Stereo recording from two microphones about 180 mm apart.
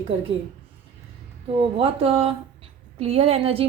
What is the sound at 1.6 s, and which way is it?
A woman's voice, 30° right (ahead or behind).